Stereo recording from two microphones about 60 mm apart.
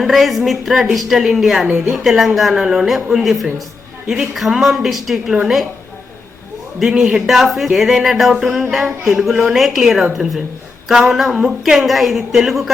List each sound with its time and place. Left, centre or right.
0.0 s a man's voice: centre
6.7 s a man's voice: centre